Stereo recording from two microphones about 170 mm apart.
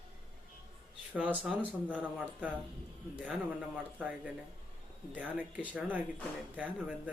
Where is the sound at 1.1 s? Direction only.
5° right (ahead or behind).